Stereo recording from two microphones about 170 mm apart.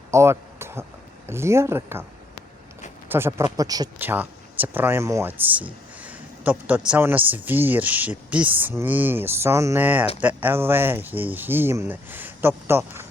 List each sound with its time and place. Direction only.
0.1 s a sound: 15° right (ahead or behind)
1.3 s speech: 15° right (ahead or behind)
3.1 s speech: 15° right (ahead or behind)
3.9 s speech: 10° right (ahead or behind)